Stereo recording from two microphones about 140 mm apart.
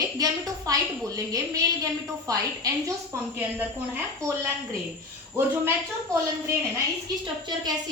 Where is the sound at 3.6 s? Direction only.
15° right (ahead or behind).